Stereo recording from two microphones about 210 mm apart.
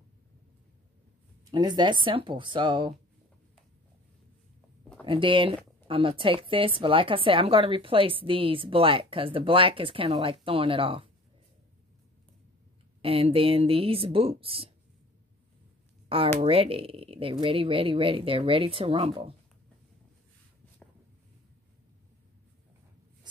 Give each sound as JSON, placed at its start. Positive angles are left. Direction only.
{"t": 1.4, "sound": "a woman's voice", "side_deg": -20}
{"t": 5.0, "sound": "a woman's voice", "side_deg": -25}
{"t": 13.0, "sound": "a woman's voice", "side_deg": -25}
{"t": 16.1, "sound": "a woman's voice", "side_deg": -25}